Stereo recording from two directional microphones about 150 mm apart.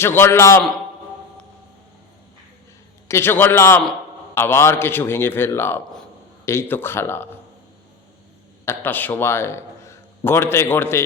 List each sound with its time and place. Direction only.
0.0 s a man's voice: 15° left (ahead or behind)
3.1 s a man's voice: 15° left (ahead or behind)
8.6 s a man's voice: 15° left (ahead or behind)